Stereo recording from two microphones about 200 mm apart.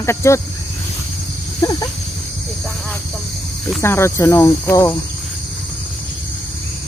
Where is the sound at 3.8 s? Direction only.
15° left (ahead or behind).